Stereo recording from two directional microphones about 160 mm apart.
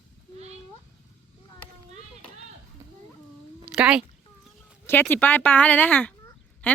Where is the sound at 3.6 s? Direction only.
5° right (ahead or behind).